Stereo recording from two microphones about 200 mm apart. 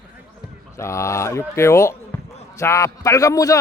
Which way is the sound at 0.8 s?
15° left (ahead or behind).